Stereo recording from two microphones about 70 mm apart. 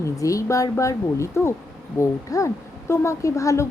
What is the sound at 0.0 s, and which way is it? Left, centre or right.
A woman's voice, left.